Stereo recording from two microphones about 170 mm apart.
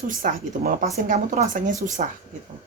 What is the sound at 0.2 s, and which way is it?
Speech, 50° right (ahead or behind).